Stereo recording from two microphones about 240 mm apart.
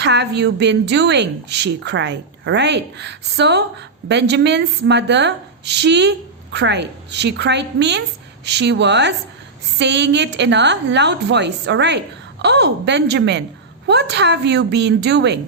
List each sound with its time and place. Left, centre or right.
0.0 s a woman's voice: right